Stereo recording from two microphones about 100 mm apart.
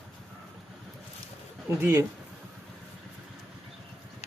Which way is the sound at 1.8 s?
25° right (ahead or behind).